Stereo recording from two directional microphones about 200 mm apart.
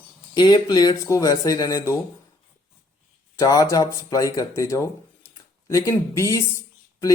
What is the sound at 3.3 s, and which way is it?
Speech, 15° left (ahead or behind).